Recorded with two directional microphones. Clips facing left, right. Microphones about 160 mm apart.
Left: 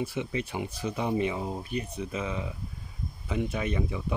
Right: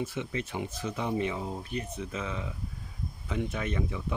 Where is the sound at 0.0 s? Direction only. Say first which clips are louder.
Left 2 dB; 10° left (ahead or behind).